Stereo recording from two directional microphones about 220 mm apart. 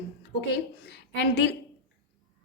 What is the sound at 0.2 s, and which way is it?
A woman's voice, 50° left (ahead or behind).